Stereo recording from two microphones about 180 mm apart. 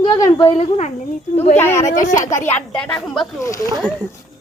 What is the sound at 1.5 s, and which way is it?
Speech, 15° left (ahead or behind).